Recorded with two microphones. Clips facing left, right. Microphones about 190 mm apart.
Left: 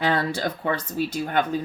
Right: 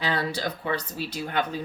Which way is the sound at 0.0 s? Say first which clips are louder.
Left 4 dB; 50° left (ahead or behind).